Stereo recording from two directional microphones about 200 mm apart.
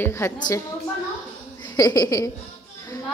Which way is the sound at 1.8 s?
15° left (ahead or behind).